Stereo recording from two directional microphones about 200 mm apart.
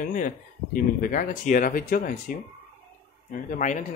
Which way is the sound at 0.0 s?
40° left (ahead or behind).